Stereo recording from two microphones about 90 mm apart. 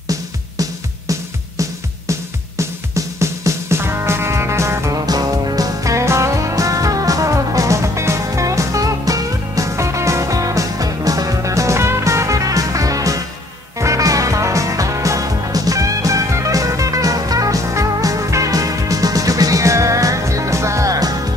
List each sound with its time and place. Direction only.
0.1 s music: 40° right (ahead or behind)
5.0 s music: 45° right (ahead or behind)